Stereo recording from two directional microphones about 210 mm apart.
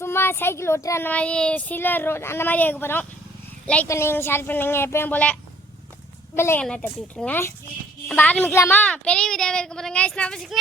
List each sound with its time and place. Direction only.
0.0 s speech: 10° left (ahead or behind)